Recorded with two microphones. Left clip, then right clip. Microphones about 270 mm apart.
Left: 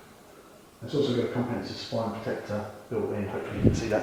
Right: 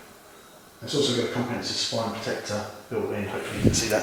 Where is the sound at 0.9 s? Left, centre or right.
Centre.